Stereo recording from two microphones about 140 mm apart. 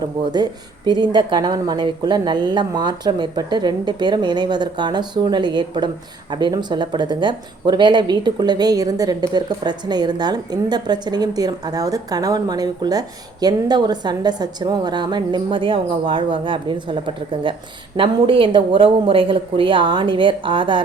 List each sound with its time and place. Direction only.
0.2 s speech: 30° right (ahead or behind)